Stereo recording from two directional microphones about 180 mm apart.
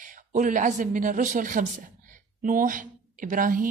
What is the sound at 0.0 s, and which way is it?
A woman's voice, 45° right (ahead or behind).